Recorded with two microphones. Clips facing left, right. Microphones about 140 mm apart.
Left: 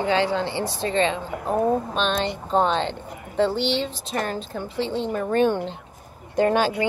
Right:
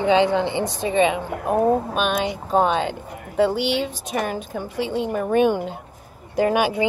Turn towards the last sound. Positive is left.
turn(degrees=-15)  # may be behind; listen again after turning